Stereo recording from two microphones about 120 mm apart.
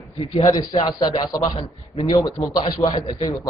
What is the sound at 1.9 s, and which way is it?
Speech, 30° left (ahead or behind).